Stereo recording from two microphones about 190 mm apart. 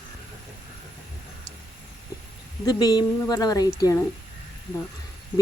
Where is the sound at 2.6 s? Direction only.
20° left (ahead or behind).